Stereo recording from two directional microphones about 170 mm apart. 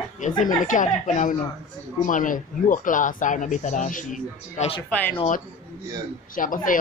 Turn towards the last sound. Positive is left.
turn(degrees=50)  # may be behind; listen again after turning